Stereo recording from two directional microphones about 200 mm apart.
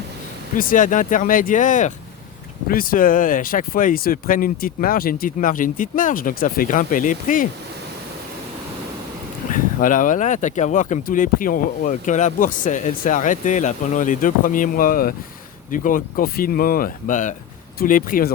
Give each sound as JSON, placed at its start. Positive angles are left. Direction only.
{"t": 0.5, "sound": "speech", "side_deg": 40}
{"t": 9.5, "sound": "speech", "side_deg": 40}